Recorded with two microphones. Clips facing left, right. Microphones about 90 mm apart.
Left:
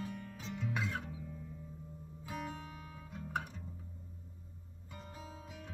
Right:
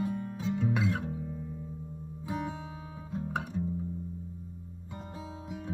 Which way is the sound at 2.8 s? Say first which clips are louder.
Right 10 dB; 25° right (ahead or behind).